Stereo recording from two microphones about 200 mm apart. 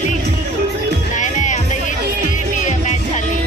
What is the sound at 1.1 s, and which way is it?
Music, 40° left (ahead or behind).